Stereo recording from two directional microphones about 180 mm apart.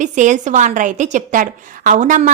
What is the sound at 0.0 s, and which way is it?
A woman's voice, 45° right (ahead or behind).